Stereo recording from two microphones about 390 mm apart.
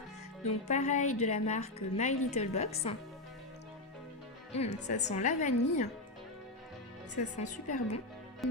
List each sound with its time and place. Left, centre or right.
0.4 s a woman's voice: centre
4.5 s a woman's voice: centre
7.3 s a woman's voice: centre